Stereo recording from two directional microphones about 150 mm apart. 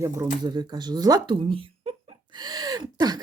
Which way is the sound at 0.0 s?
25° right (ahead or behind).